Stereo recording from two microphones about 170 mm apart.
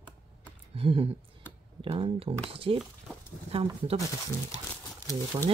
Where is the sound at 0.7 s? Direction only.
35° right (ahead or behind).